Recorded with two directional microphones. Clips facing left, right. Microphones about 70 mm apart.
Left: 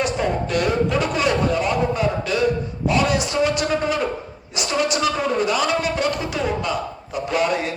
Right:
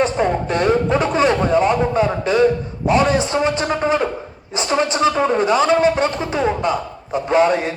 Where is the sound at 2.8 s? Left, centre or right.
Right.